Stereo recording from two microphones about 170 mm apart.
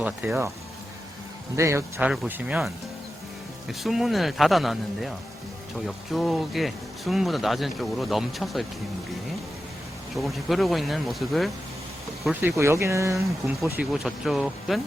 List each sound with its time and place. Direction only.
0.0 s speech: 10° right (ahead or behind)
1.5 s speech: 15° right (ahead or behind); by 8.6 s centre (ahead or behind)
10.2 s speech: centre (ahead or behind); by 13.1 s 15° right (ahead or behind)
13.7 s speech: centre (ahead or behind)